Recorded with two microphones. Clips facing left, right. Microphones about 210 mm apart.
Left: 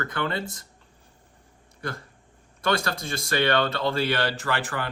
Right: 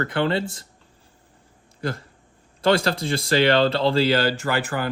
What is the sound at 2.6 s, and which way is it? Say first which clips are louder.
Speech: right 6 dB; 30° right (ahead or behind).